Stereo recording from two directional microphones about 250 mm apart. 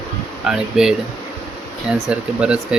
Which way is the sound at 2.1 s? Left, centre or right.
Centre.